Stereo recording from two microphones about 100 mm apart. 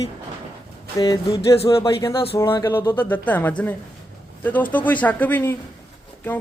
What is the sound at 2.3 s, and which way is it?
Speech, 25° left (ahead or behind).